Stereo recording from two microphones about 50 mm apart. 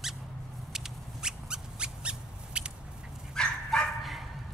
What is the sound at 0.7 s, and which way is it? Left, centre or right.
Squeak, centre.